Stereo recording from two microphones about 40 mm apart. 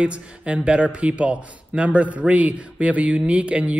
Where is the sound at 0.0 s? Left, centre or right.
Right.